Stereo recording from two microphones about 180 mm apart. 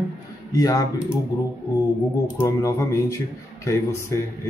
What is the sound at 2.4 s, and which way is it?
Speech, 15° left (ahead or behind).